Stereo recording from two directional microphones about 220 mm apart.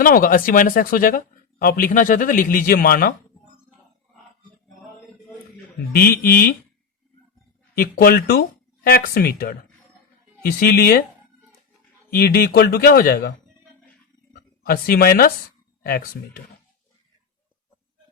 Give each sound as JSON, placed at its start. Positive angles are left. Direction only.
{"t": 0.0, "sound": "speech", "side_deg": 40}
{"t": 5.9, "sound": "speech", "side_deg": 45}
{"t": 7.8, "sound": "speech", "side_deg": 45}
{"t": 12.1, "sound": "speech", "side_deg": 45}
{"t": 14.6, "sound": "speech", "side_deg": 40}